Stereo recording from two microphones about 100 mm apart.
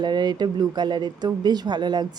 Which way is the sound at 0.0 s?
45° right (ahead or behind).